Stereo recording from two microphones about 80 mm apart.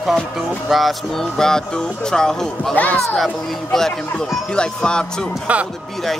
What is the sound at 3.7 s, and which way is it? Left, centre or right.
Speech, centre.